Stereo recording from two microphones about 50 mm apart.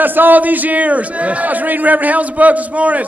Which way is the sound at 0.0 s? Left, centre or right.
Right.